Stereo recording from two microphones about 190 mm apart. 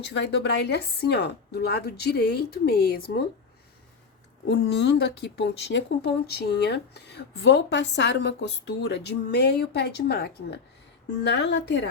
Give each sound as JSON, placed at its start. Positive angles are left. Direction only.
{"t": 0.0, "sound": "speech", "side_deg": 70}
{"t": 4.4, "sound": "speech", "side_deg": 60}